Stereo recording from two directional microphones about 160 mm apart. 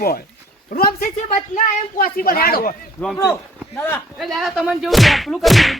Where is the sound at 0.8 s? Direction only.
65° left (ahead or behind).